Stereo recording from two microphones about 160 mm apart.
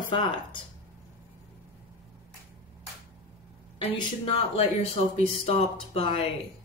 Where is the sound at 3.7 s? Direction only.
35° left (ahead or behind).